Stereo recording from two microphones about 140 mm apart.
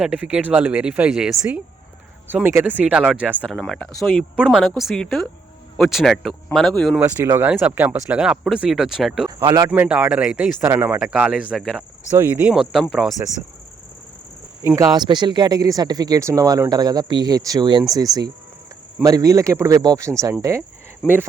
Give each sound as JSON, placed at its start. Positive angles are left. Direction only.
{"t": 0.0, "sound": "speech", "side_deg": -5}
{"t": 3.5, "sound": "speech", "side_deg": 5}
{"t": 7.3, "sound": "speech", "side_deg": -15}
{"t": 9.4, "sound": "speech", "side_deg": -30}
{"t": 9.6, "sound": "speech", "side_deg": -10}
{"t": 12.9, "sound": "speech", "side_deg": 0}
{"t": 14.9, "sound": "speech", "side_deg": -30}